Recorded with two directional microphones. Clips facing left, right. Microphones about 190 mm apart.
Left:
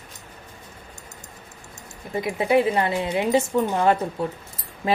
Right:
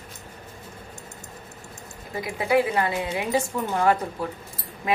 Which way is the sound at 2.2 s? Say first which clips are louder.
Left 2 dB; 25° left (ahead or behind).